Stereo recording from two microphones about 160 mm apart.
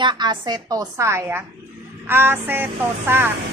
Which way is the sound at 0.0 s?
30° right (ahead or behind).